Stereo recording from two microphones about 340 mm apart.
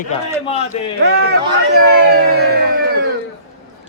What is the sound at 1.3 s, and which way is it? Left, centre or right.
Speech, right.